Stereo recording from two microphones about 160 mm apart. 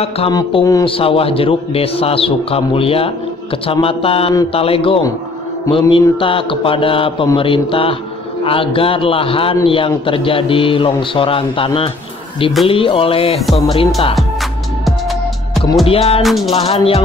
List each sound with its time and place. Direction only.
0.3 s a man's voice: 30° left (ahead or behind)
15.9 s a man's voice: 40° left (ahead or behind)
16.2 s music: centre (ahead or behind)
16.5 s a man's voice: 40° left (ahead or behind)